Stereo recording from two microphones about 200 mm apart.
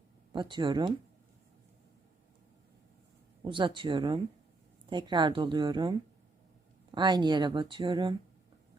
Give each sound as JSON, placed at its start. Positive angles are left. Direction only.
{"t": 0.3, "sound": "speech", "side_deg": -25}
{"t": 3.4, "sound": "speech", "side_deg": -25}